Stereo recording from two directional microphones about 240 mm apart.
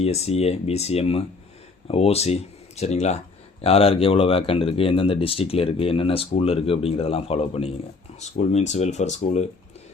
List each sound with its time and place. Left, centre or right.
0.0 s speech: left